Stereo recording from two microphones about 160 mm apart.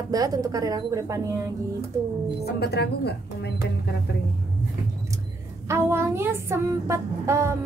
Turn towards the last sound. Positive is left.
turn(degrees=-15)  # may be behind; listen again after turning